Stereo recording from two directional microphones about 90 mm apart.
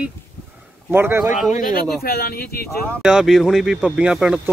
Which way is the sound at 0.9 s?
25° right (ahead or behind).